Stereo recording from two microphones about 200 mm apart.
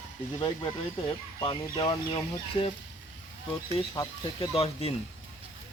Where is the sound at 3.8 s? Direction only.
30° left (ahead or behind).